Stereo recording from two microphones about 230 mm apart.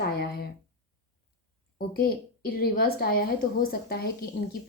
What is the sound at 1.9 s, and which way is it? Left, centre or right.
A woman's voice, left.